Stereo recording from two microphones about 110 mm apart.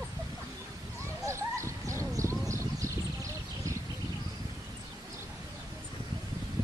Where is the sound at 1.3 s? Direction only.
25° right (ahead or behind).